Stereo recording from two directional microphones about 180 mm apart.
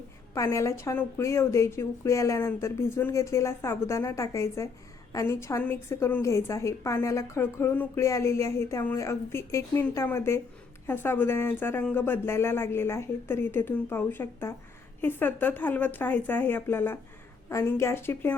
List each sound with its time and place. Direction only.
0.3 s a woman's voice: 15° left (ahead or behind)